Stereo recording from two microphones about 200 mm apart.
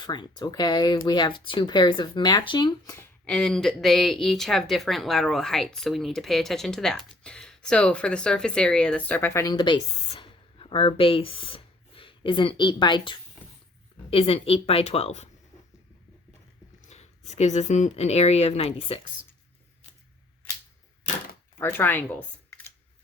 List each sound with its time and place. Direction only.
0.0 s speech: 20° left (ahead or behind)
3.2 s speech: 5° left (ahead or behind); by 15.3 s 30° left (ahead or behind)
16.9 s speech: 35° left (ahead or behind)
21.6 s speech: 10° left (ahead or behind)